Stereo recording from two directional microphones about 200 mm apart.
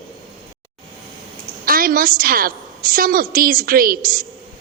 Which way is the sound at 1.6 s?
45° right (ahead or behind).